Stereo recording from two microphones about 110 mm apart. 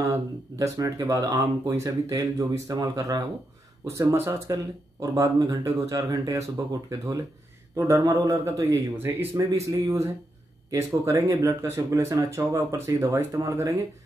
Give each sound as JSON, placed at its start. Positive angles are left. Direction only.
{"t": 0.0, "sound": "speech", "side_deg": -30}